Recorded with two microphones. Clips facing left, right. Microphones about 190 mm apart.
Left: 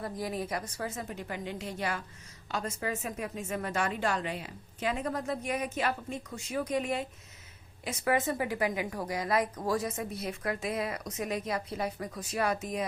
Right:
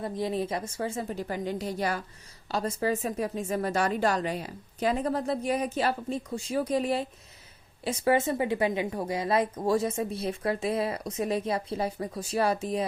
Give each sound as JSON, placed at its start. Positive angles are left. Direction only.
{"t": 0.0, "sound": "a woman's voice", "side_deg": -25}